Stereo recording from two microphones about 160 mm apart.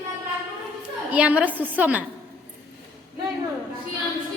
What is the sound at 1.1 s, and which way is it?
Speech, 10° right (ahead or behind).